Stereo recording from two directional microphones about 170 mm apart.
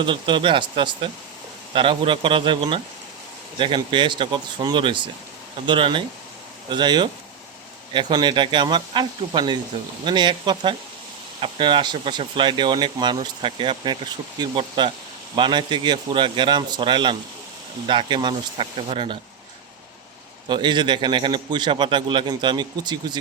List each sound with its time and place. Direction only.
0.0 s speech: 30° right (ahead or behind)
8.1 s speech: 25° right (ahead or behind)
20.5 s speech: 25° right (ahead or behind)